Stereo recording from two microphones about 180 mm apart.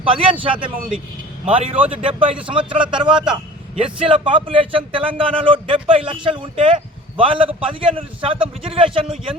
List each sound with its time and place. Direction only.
0.0 s a man's voice: 30° right (ahead or behind)